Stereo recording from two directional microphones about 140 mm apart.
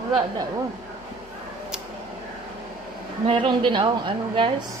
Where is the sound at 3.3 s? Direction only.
35° right (ahead or behind).